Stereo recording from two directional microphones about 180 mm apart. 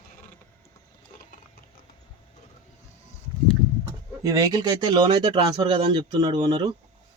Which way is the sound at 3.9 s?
20° right (ahead or behind).